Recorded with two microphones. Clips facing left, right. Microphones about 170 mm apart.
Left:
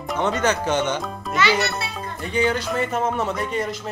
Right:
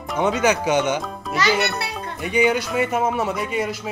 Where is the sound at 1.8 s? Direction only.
70° right (ahead or behind).